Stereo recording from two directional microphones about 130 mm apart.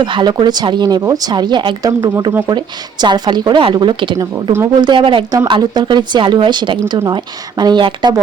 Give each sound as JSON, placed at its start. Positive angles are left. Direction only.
{"t": 0.0, "sound": "speech", "side_deg": -35}